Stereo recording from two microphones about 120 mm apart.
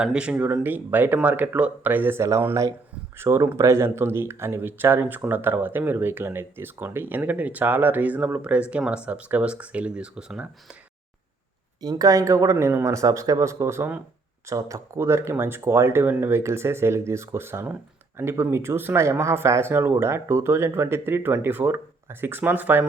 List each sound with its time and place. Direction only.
0.0 s speech: 10° right (ahead or behind)
11.8 s speech: 30° right (ahead or behind); by 22.9 s 15° right (ahead or behind)